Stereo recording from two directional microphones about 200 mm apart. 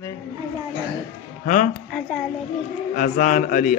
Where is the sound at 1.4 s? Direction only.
40° left (ahead or behind).